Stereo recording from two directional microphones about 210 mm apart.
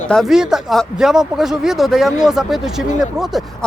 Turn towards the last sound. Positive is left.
turn(degrees=0)  # may be behind; listen again after turning